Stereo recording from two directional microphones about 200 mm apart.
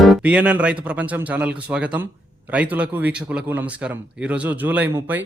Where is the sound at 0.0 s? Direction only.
5° right (ahead or behind).